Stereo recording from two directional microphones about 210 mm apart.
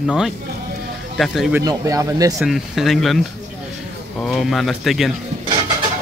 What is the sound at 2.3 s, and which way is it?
Speech, centre (ahead or behind).